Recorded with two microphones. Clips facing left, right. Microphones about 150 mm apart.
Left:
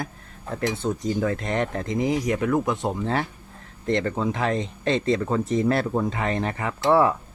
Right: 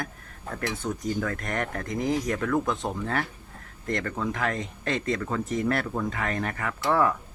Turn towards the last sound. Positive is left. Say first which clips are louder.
# left 5 dB
turn(degrees=25)  # may be behind; listen again after turning